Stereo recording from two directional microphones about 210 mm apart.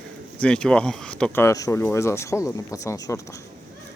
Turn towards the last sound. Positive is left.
turn(degrees=15)  # may be behind; listen again after turning